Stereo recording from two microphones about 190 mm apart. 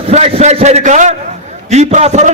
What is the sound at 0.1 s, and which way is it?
A man's voice, 35° right (ahead or behind).